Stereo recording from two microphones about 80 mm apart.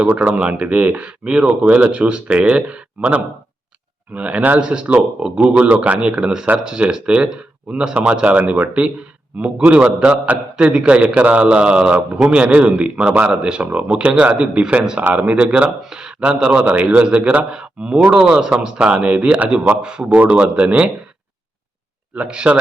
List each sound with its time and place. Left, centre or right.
0.0 s a man's voice: centre
22.1 s a man's voice: centre